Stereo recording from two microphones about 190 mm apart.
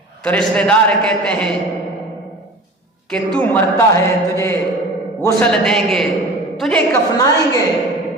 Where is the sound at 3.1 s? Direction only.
5° left (ahead or behind).